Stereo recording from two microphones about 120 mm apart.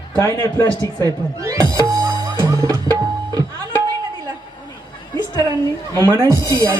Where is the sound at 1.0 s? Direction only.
25° right (ahead or behind).